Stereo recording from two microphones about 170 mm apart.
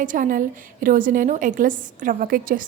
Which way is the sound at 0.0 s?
50° right (ahead or behind).